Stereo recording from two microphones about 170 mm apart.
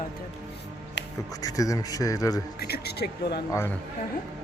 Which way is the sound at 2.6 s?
70° left (ahead or behind).